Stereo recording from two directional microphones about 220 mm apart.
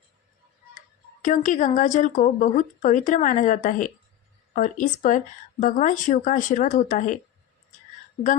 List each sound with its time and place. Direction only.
1.2 s a woman's voice: 35° left (ahead or behind)